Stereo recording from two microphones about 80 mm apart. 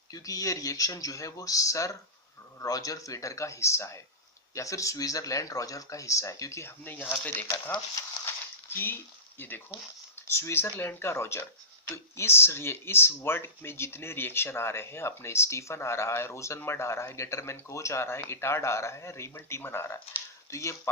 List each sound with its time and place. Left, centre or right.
0.1 s speech: left
8.7 s speech: left